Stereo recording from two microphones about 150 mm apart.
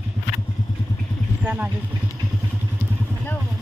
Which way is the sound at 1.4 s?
10° right (ahead or behind).